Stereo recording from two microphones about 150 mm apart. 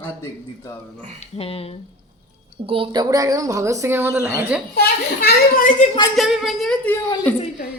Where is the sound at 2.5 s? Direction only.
40° right (ahead or behind).